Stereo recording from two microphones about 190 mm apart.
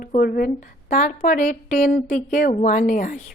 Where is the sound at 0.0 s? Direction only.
50° left (ahead or behind).